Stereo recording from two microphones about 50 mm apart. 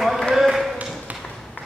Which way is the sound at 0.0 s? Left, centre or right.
Centre.